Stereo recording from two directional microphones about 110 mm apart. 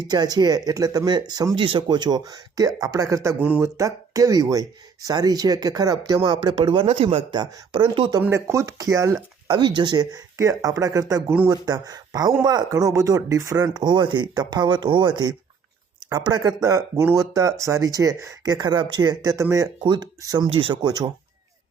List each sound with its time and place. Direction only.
0.1 s speech: 40° right (ahead or behind)
6.8 s speech: 60° right (ahead or behind)
7.3 s speech: 40° right (ahead or behind)
7.8 s speech: 50° right (ahead or behind)
8.2 s speech: 25° right (ahead or behind)
9.5 s speech: 45° right (ahead or behind); by 19.6 s 30° right (ahead or behind)
19.8 s speech: 40° right (ahead or behind)
20.5 s speech: 55° right (ahead or behind)
20.8 s speech: 35° right (ahead or behind)